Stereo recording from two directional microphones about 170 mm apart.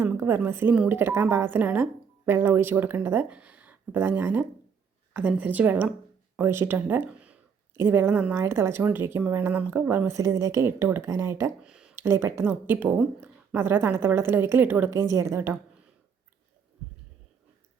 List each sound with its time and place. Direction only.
0.0 s speech: 15° right (ahead or behind)
11.7 s a sound: 5° right (ahead or behind)
12.0 s speech: 15° right (ahead or behind)